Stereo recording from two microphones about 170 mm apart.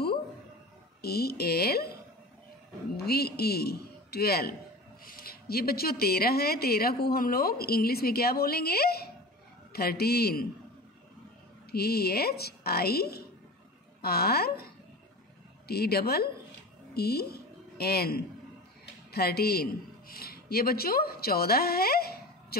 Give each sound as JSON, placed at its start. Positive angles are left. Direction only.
{"t": 1.0, "sound": "a woman's voice", "side_deg": 70}
{"t": 3.0, "sound": "a man's voice", "side_deg": 70}
{"t": 11.7, "sound": "a woman's voice", "side_deg": 70}